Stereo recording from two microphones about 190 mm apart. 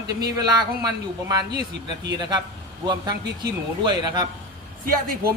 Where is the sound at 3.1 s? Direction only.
60° right (ahead or behind).